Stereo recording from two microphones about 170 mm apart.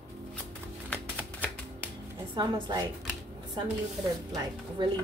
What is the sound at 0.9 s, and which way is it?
Typewriter, 5° left (ahead or behind).